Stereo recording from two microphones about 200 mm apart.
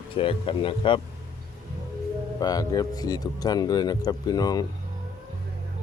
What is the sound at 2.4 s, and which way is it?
Speech, 20° left (ahead or behind).